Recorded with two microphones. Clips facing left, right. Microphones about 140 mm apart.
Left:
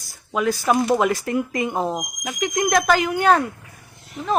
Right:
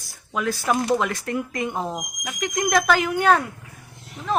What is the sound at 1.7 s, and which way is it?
Speech, 35° left (ahead or behind).